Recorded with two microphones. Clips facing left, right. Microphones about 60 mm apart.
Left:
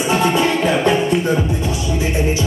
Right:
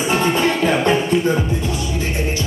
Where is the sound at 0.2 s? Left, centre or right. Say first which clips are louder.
Left 1 dB; centre.